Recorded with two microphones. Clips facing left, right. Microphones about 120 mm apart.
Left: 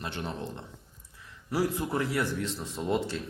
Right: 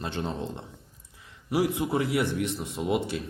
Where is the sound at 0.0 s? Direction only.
25° right (ahead or behind).